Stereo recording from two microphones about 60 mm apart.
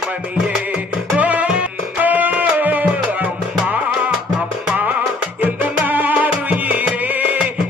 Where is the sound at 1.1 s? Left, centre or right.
Right.